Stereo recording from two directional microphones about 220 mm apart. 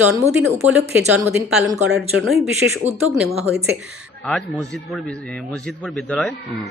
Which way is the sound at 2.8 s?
10° right (ahead or behind).